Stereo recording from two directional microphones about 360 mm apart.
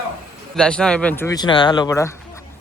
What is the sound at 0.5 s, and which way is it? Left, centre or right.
A man's voice, centre.